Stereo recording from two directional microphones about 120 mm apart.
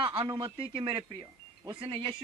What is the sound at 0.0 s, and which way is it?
Speech, 55° right (ahead or behind).